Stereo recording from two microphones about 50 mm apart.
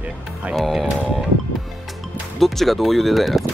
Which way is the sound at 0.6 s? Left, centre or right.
Centre.